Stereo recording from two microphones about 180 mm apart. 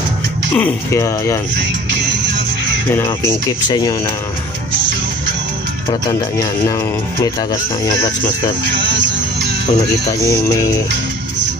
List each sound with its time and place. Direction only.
0.5 s speech: 10° left (ahead or behind)
2.9 s speech: 15° left (ahead or behind)
5.9 s speech: 20° left (ahead or behind)
10.0 s speech: 20° left (ahead or behind)